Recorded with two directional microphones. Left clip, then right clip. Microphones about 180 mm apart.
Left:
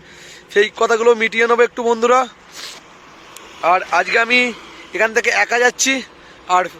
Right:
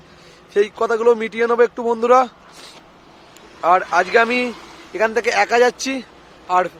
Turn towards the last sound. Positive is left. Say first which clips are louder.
# left 2 dB
turn(degrees=0)  # may be behind; listen again after turning